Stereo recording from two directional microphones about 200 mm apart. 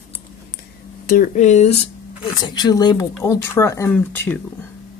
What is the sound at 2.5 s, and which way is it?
Speech, 20° left (ahead or behind).